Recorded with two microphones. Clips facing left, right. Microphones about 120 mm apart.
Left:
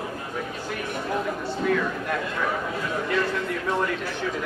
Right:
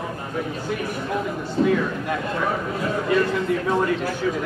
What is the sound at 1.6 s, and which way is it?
Speech, 45° right (ahead or behind).